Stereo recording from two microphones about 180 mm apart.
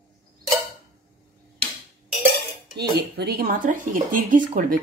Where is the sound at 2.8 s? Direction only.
65° right (ahead or behind).